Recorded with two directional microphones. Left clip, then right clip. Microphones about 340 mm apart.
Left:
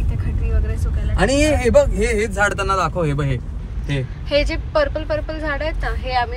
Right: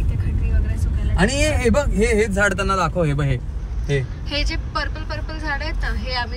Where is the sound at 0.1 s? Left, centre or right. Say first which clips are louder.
Left 2 dB; centre.